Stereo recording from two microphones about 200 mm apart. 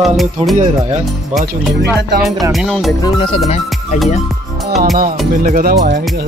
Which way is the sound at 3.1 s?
30° left (ahead or behind).